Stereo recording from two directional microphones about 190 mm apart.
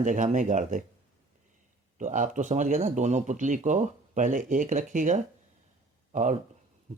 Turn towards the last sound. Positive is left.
turn(degrees=-40)  # may be behind; listen again after turning